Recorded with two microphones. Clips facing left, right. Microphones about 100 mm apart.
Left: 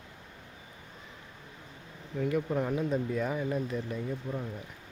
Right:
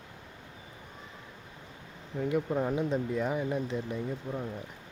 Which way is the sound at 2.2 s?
20° right (ahead or behind).